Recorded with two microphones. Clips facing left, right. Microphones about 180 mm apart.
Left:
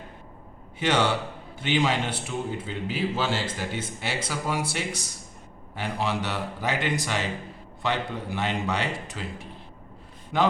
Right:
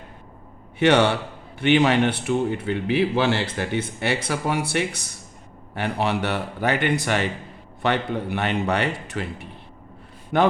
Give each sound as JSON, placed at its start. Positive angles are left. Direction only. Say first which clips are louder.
{"t": 0.8, "sound": "a man's voice", "louder": "right 6 dB", "side_deg": -65}